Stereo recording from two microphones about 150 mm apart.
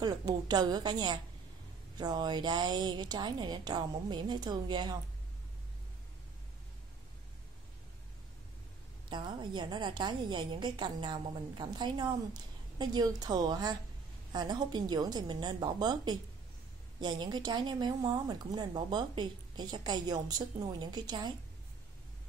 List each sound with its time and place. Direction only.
0.0 s a woman's voice: 25° right (ahead or behind)
9.1 s a woman's voice: 30° right (ahead or behind)